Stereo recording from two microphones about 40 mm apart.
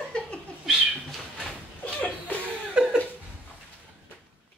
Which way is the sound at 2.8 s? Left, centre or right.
Right.